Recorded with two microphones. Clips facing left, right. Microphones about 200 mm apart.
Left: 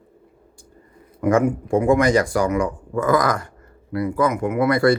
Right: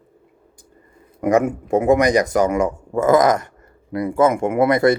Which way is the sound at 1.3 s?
20° right (ahead or behind).